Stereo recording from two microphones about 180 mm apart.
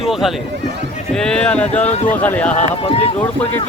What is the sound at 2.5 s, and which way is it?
Speech, 35° left (ahead or behind).